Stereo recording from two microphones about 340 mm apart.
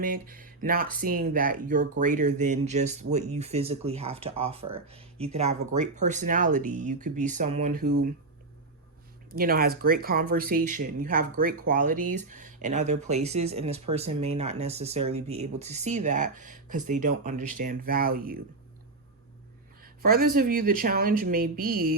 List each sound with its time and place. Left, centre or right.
0.0 s speech: right
9.3 s speech: right
19.8 s speech: right